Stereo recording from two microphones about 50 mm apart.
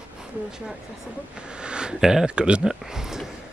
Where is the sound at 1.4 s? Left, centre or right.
Centre.